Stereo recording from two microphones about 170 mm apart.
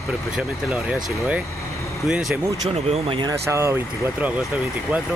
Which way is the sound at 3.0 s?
30° right (ahead or behind).